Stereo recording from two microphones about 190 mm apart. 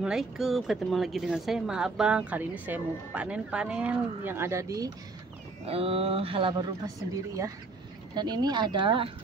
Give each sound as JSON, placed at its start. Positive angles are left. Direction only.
{"t": 0.0, "sound": "speech", "side_deg": 0}
{"t": 5.7, "sound": "speech", "side_deg": -30}
{"t": 8.1, "sound": "speech", "side_deg": -25}